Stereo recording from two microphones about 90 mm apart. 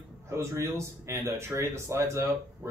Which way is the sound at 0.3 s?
30° right (ahead or behind).